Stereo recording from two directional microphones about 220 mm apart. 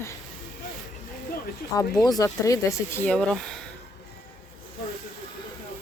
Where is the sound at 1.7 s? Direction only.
15° left (ahead or behind).